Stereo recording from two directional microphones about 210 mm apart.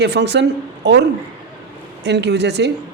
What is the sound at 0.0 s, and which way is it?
Speech, 55° right (ahead or behind).